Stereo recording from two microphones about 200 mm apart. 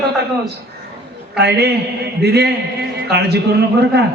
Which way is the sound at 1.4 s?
55° right (ahead or behind).